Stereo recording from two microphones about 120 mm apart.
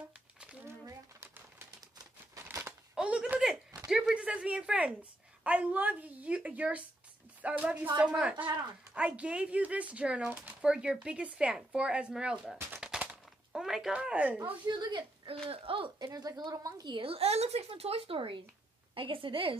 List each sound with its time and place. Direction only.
0.4 s a sound: 10° right (ahead or behind)
0.7 s bird: 20° right (ahead or behind)
2.4 s crumpling: 20° right (ahead or behind)
2.9 s a sound: 10° right (ahead or behind)
5.4 s speech: 10° right (ahead or behind)
12.8 s a sound: 5° right (ahead or behind)
14.7 s a woman's voice: 40° right (ahead or behind)
16.1 s a woman's voice: 35° right (ahead or behind)
16.9 s a woman's voice: 50° right (ahead or behind)